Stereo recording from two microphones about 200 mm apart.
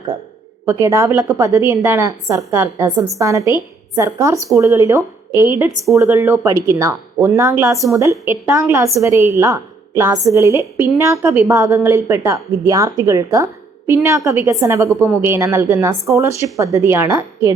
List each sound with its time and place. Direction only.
0.6 s a woman's voice: 15° right (ahead or behind)